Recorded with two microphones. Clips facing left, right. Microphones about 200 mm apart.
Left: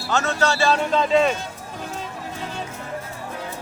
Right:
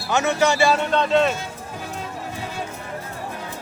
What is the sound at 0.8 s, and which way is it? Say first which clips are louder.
Speech: even; centre (ahead or behind).